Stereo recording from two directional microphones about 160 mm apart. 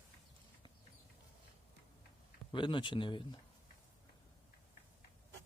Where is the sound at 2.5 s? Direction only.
30° left (ahead or behind).